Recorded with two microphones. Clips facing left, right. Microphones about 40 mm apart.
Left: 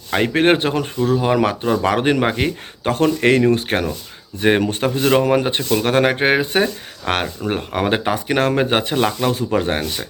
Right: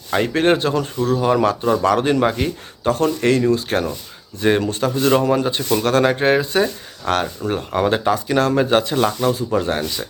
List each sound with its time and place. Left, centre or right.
0.1 s speech: left
1.0 s speech: left
7.7 s speech: left
7.9 s speech: left